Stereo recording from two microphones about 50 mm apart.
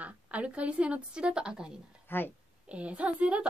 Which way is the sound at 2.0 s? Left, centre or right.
Left.